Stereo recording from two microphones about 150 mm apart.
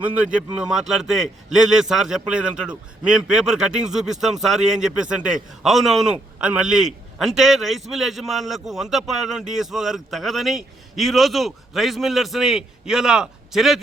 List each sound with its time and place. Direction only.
0.0 s a man's voice: 10° right (ahead or behind)